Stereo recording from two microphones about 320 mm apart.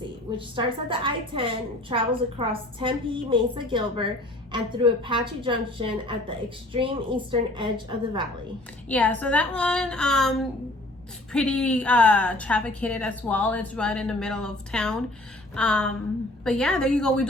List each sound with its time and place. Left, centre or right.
0.3 s a woman's voice: centre
8.9 s a woman's voice: centre